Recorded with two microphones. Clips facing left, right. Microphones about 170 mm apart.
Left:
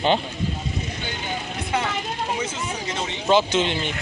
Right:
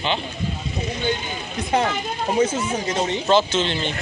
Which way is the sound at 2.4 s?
40° right (ahead or behind).